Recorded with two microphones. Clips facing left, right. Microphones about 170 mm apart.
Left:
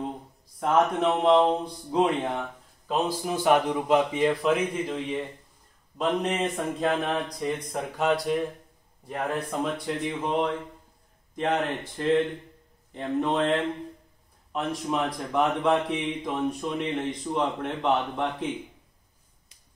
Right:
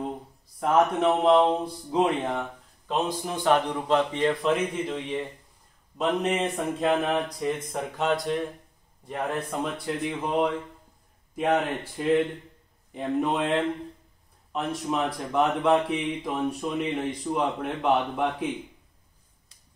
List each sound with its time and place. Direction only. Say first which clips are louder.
0.6 s speech: right 1 dB; 5° right (ahead or behind)
12.0 s speech: even; 10° right (ahead or behind)